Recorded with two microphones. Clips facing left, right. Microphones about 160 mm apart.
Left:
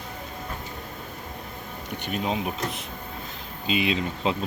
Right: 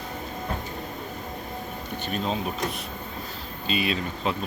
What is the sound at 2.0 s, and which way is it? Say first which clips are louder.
Speech: left 1 dB; 15° left (ahead or behind).